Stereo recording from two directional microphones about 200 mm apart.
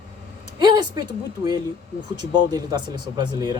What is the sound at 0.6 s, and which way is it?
A man's voice, 20° right (ahead or behind).